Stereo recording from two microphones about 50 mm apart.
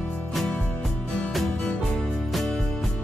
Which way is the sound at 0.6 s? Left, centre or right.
Left.